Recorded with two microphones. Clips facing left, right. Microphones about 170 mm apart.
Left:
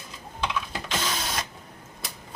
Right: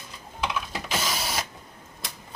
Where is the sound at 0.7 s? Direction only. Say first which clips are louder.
Even; 5° right (ahead or behind).